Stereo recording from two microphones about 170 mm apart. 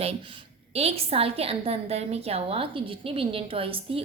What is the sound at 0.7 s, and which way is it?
A woman's voice, 35° right (ahead or behind).